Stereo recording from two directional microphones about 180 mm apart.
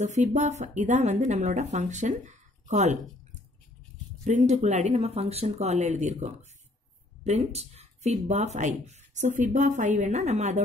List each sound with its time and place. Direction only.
0.0 s speech: 40° right (ahead or behind)